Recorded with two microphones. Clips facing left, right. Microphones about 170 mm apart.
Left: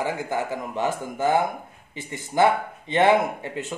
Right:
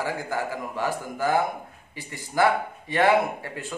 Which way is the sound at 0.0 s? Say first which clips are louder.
Left 2 dB; 20° left (ahead or behind).